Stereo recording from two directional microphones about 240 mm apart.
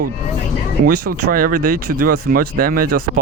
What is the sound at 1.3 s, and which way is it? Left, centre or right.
Speech, right.